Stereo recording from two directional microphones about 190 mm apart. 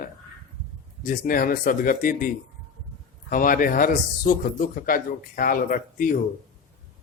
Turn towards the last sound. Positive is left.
turn(degrees=50)  # may be behind; listen again after turning